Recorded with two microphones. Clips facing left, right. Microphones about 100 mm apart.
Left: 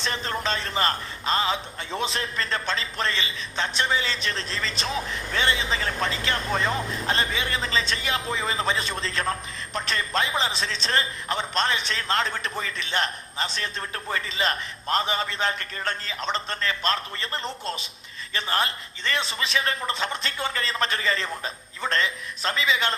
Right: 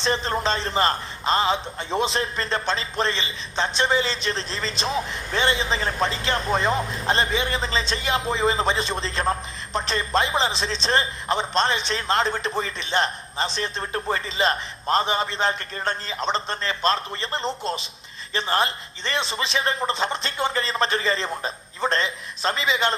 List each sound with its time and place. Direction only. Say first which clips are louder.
0.0 s a man's voice: right 5 dB; 25° right (ahead or behind)